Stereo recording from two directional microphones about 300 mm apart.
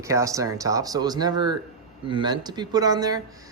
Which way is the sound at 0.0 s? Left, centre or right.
Centre.